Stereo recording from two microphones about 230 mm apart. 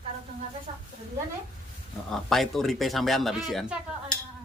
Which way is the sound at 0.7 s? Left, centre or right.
Right.